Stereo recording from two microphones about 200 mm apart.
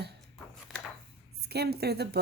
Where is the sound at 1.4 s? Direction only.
55° right (ahead or behind).